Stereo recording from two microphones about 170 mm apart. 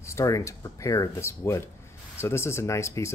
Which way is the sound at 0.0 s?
20° left (ahead or behind).